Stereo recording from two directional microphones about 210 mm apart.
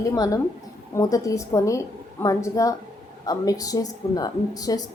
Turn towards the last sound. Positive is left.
turn(degrees=15)  # may be behind; listen again after turning